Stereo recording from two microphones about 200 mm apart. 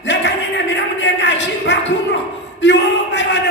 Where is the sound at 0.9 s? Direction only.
65° left (ahead or behind).